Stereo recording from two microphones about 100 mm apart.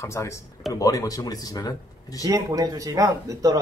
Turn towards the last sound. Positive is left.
turn(degrees=-35)  # may be behind; listen again after turning